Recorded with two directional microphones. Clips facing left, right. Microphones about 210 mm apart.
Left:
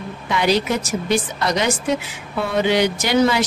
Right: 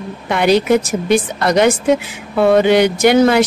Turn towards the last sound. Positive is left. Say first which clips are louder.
# right 6 dB
turn(degrees=-55)  # may be behind; listen again after turning